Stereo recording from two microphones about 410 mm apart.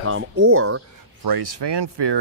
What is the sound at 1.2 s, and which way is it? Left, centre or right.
Speech, right.